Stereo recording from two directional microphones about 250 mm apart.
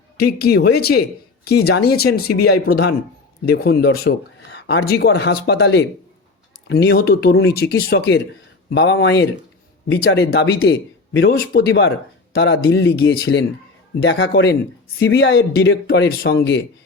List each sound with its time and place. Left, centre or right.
0.2 s speech: left